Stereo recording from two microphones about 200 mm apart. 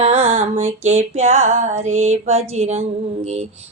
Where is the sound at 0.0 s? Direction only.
30° right (ahead or behind).